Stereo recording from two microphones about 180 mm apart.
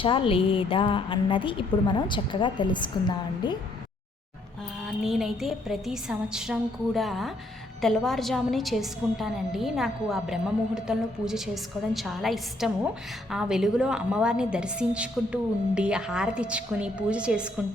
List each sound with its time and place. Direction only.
0.0 s a woman's voice: 30° left (ahead or behind)
5.0 s a woman's voice: centre (ahead or behind)